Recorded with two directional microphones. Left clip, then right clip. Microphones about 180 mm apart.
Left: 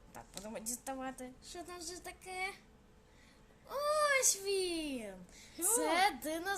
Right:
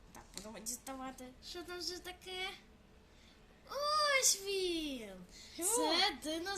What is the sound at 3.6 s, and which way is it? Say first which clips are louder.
A child's voice: left 1 dB; 40° left (ahead or behind).